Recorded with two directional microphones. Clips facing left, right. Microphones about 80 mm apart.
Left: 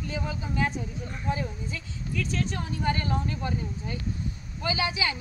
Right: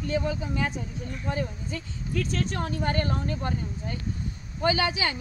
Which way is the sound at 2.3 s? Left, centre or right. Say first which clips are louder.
Right 2 dB; right.